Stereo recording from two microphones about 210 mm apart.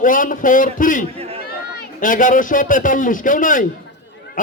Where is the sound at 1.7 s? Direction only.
40° left (ahead or behind).